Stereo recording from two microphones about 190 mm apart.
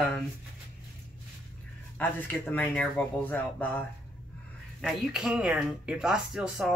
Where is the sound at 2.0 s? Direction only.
10° left (ahead or behind).